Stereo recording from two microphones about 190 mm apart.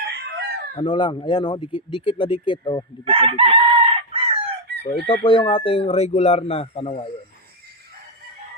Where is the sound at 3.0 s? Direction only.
30° right (ahead or behind).